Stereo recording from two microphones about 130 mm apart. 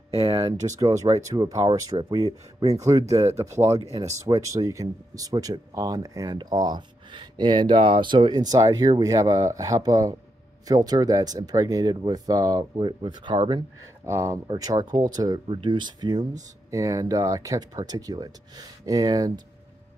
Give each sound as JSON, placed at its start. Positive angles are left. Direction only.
{"t": 0.2, "sound": "speech", "side_deg": -30}
{"t": 14.0, "sound": "speech", "side_deg": -20}
{"t": 14.5, "sound": "speech", "side_deg": -30}